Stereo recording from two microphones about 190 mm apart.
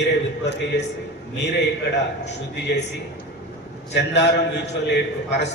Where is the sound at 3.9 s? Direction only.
65° left (ahead or behind).